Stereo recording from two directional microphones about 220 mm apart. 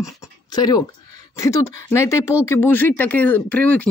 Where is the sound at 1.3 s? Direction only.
15° left (ahead or behind).